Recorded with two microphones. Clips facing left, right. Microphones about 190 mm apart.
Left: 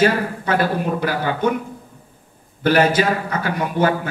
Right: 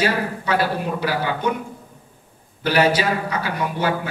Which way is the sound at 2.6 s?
50° left (ahead or behind).